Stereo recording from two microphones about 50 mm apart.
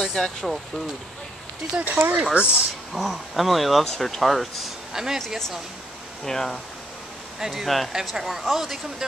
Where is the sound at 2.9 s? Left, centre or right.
Centre.